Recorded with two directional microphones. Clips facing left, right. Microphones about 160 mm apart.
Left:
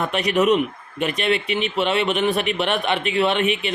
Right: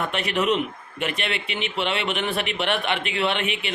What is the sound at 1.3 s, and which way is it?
Speech, 20° right (ahead or behind).